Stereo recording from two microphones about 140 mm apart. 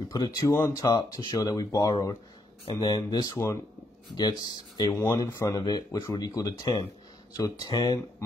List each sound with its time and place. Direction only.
0.1 s speech: 30° left (ahead or behind)